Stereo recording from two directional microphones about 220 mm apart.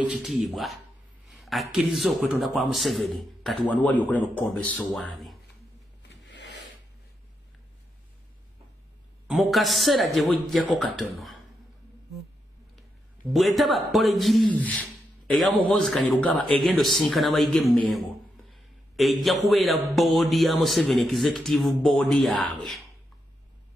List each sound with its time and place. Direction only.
0.0 s a man's voice: 5° right (ahead or behind)
6.2 s a sound: 50° left (ahead or behind)
9.3 s a man's voice: centre (ahead or behind)
13.3 s a man's voice: centre (ahead or behind)